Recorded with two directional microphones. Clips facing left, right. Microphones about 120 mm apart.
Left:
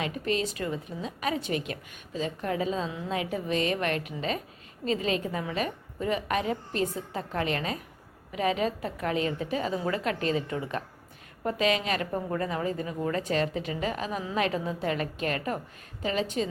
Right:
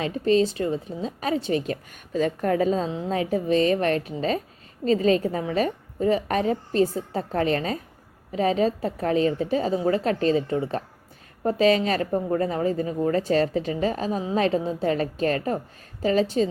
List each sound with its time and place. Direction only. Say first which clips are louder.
0.0 s a woman's voice: right 8 dB; 30° right (ahead or behind)
2.1 s a woman's voice: right 8 dB; 50° right (ahead or behind)